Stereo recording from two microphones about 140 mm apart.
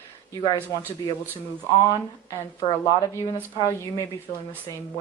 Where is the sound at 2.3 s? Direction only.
30° left (ahead or behind).